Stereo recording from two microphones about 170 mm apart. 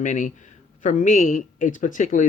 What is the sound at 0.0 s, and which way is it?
Speech, 45° left (ahead or behind).